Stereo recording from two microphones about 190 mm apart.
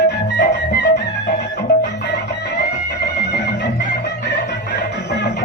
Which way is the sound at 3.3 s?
65° left (ahead or behind).